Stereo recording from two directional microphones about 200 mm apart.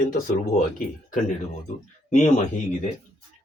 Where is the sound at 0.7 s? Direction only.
40° left (ahead or behind).